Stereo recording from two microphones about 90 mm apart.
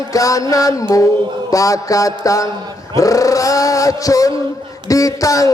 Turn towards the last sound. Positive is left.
turn(degrees=40)  # may be behind; listen again after turning